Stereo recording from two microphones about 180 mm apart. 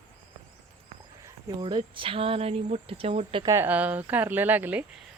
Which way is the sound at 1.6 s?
30° right (ahead or behind).